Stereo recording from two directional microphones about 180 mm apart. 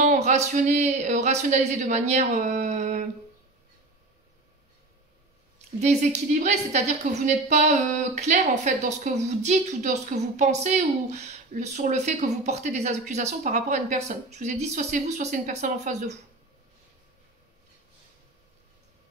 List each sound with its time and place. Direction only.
0.0 s a sound: 40° right (ahead or behind)
0.5 s speech: 40° right (ahead or behind)
5.8 s speech: 40° right (ahead or behind)